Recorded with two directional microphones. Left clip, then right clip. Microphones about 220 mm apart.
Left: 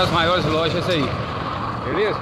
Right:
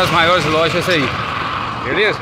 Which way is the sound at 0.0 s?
25° right (ahead or behind).